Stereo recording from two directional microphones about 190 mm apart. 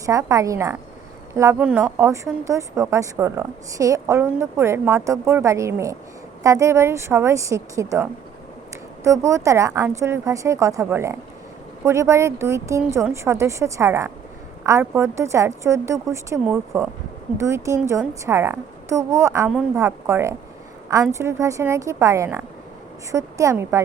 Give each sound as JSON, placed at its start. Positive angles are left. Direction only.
{"t": 0.0, "sound": "a woman's voice", "side_deg": -15}